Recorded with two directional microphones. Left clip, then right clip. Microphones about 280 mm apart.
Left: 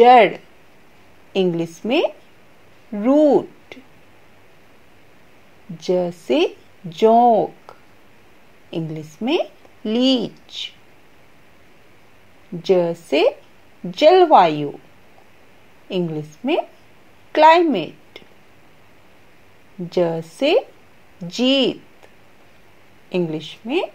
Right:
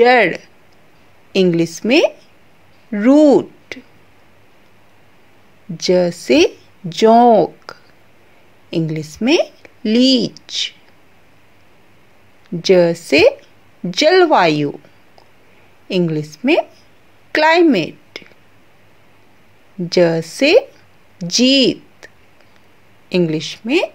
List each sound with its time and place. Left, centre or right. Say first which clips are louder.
0.0 s speech: left 1 dB; right
5.9 s speech: right 6 dB; right
12.6 s speech: right 6 dB; right
15.9 s a woman's voice: right 6 dB; right
19.9 s speech: right 6 dB; right